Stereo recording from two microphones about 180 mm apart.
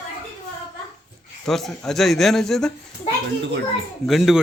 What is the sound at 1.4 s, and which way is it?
A man's voice, centre (ahead or behind).